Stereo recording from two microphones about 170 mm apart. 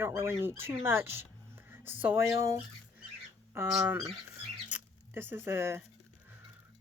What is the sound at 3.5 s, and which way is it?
Speech, 15° right (ahead or behind).